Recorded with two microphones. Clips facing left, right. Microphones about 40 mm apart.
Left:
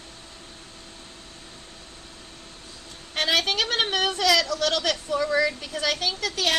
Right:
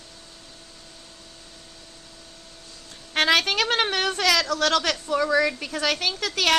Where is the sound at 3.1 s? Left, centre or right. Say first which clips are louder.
Right 3 dB; right.